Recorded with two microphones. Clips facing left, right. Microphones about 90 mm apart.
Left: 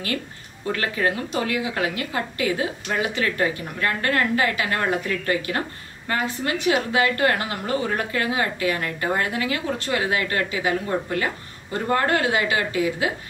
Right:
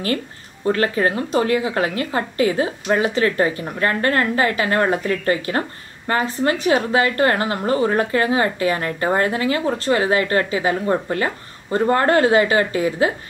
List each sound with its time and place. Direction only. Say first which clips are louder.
0.7 s a woman's voice: right 5 dB; 35° right (ahead or behind)